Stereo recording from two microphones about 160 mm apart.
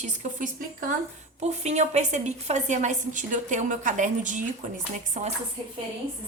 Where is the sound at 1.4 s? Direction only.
45° right (ahead or behind).